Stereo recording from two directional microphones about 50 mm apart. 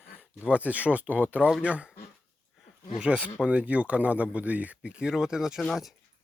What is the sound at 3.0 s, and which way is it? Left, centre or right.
Speech, right.